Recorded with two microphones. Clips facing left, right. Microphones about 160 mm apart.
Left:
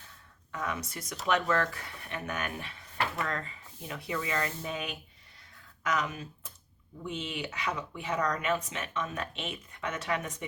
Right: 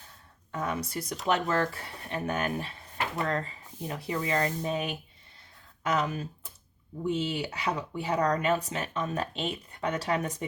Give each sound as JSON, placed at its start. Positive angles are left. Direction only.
{"t": 0.5, "sound": "speech", "side_deg": -30}